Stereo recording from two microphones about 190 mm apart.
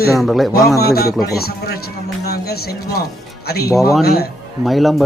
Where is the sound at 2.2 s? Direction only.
55° left (ahead or behind).